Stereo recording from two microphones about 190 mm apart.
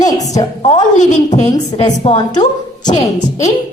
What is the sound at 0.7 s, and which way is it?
Speech, 40° left (ahead or behind).